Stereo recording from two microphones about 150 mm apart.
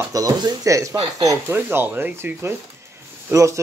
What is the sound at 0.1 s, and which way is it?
Speech, 25° right (ahead or behind).